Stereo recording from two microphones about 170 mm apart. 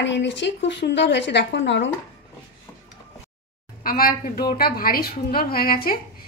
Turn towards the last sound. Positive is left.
turn(degrees=60)  # may be behind; listen again after turning